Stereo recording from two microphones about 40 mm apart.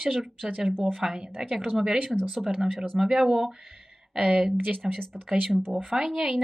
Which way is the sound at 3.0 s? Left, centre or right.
Centre.